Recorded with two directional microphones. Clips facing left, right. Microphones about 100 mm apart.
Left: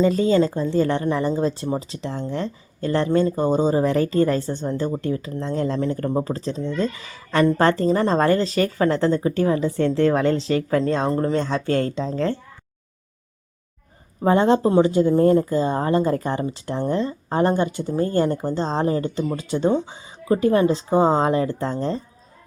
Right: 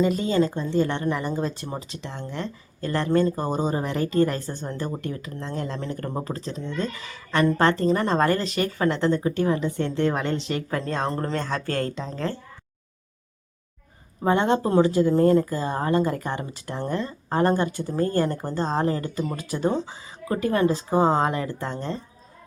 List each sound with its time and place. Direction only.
0.6 s speech: 35° left (ahead or behind)
11.0 s speech: 15° left (ahead or behind)
14.3 s speech: 30° left (ahead or behind)